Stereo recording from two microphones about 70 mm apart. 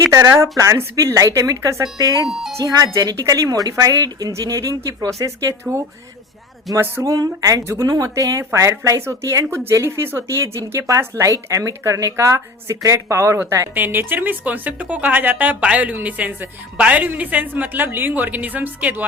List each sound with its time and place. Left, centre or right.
0.1 s speech: right
2.0 s a woman's voice: right
2.3 s speech: centre
2.6 s a woman's voice: right
4.3 s speech: right
6.7 s speech: centre
7.0 s a woman's voice: right
13.7 s speech: right